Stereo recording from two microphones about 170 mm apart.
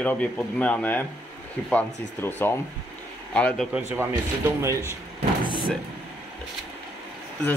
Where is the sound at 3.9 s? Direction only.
15° right (ahead or behind).